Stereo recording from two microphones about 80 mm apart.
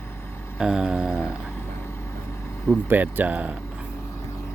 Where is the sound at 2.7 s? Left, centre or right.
Right.